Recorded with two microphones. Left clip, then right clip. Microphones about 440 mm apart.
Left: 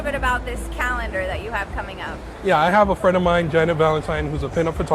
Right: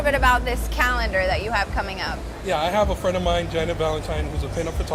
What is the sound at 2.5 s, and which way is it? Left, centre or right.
Speech, left.